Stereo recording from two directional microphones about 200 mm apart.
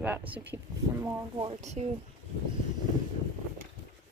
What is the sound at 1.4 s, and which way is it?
Speech, 30° right (ahead or behind).